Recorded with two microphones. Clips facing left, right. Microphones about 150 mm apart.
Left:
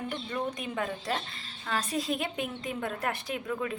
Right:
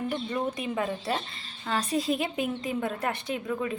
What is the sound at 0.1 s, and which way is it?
A woman's voice, 5° right (ahead or behind).